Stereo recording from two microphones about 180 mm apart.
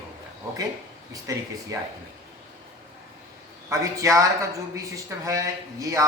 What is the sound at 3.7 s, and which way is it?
Speech, 15° right (ahead or behind).